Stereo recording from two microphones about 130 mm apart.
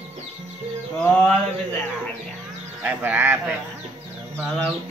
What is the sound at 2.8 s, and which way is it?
Speech, 10° right (ahead or behind).